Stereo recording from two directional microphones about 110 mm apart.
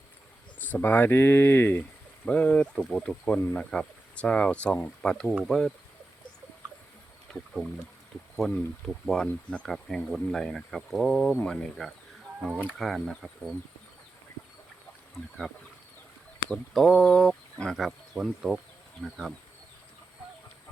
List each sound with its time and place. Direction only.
0.6 s speech: 15° left (ahead or behind)
7.3 s speech: 5° right (ahead or behind)
12.5 s speech: 10° right (ahead or behind)
12.8 s speech: centre (ahead or behind)
15.1 s speech: centre (ahead or behind)
16.7 s speech: centre (ahead or behind)